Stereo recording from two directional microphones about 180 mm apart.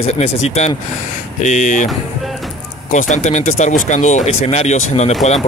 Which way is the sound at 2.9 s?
45° left (ahead or behind).